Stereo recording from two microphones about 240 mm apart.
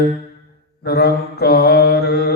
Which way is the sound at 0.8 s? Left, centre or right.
Left.